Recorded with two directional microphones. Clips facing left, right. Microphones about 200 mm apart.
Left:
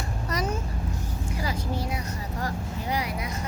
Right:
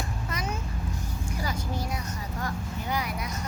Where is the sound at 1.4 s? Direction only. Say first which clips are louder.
Left 2 dB; 30° left (ahead or behind).